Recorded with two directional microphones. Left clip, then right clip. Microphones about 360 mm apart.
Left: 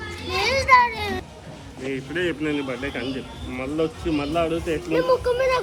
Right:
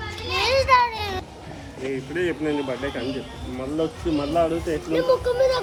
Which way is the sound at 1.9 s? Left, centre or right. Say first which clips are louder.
Even; centre.